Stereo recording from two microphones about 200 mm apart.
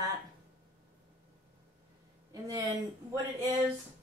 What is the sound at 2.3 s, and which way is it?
Speech, 15° right (ahead or behind).